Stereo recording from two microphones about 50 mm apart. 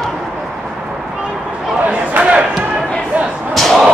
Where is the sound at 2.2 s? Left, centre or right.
Right.